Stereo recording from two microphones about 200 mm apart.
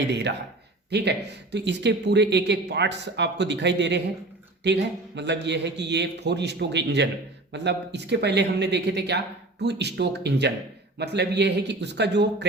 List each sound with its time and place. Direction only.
0.1 s speech: 60° right (ahead or behind)